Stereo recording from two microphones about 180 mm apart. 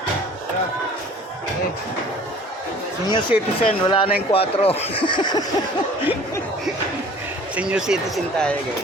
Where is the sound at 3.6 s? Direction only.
30° left (ahead or behind).